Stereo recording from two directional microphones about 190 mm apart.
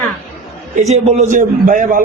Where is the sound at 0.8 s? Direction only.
35° right (ahead or behind).